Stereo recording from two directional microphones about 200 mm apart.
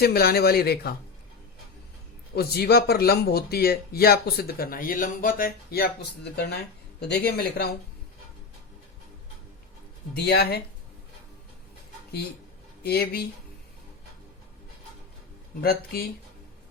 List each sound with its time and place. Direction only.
0.0 s speech: 50° left (ahead or behind)
2.3 s speech: 50° left (ahead or behind)
10.2 s speech: 55° left (ahead or behind)
12.8 s speech: 50° left (ahead or behind)
15.6 s speech: 50° left (ahead or behind)